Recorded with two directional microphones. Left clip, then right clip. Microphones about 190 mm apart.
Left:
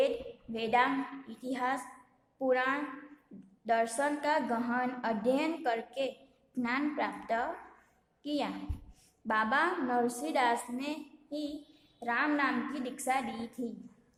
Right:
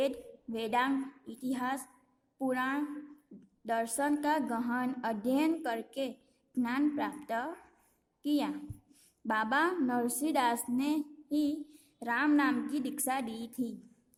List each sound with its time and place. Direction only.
0.5 s a woman's voice: 40° right (ahead or behind)